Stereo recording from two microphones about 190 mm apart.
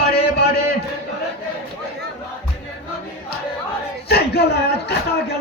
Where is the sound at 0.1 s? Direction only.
55° left (ahead or behind).